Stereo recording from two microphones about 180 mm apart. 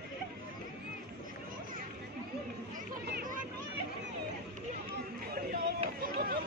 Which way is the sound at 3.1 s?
55° right (ahead or behind).